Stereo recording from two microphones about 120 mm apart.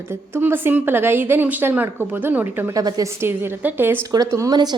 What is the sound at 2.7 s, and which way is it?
Speech, 30° right (ahead or behind).